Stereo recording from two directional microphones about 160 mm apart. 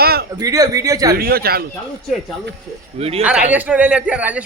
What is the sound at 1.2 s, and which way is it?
Speech, 70° right (ahead or behind).